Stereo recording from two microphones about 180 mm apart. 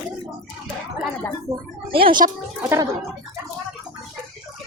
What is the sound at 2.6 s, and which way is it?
Speech, 15° right (ahead or behind).